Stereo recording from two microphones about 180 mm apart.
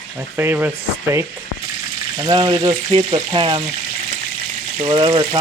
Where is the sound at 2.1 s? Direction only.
25° right (ahead or behind).